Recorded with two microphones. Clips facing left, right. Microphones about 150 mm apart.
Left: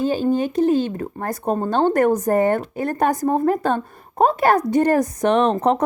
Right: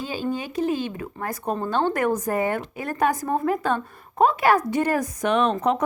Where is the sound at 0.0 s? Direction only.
50° left (ahead or behind).